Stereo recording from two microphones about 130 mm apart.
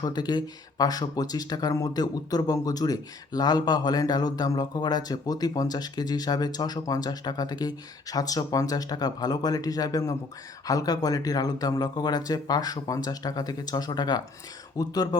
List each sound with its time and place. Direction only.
0.0 s speech: 35° left (ahead or behind)